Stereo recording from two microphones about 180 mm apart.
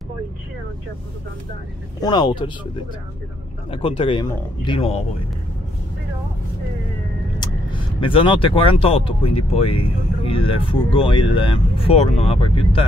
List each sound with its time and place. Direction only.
2.0 s speech: 25° left (ahead or behind)
3.7 s speech: 30° left (ahead or behind)
7.3 s speech: 30° left (ahead or behind)